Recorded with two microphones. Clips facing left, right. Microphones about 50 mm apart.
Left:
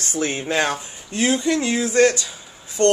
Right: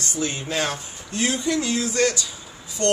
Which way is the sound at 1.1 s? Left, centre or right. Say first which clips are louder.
Left 4 dB; left.